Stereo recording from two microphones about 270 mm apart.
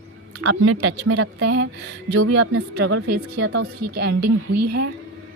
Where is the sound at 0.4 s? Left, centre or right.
Right.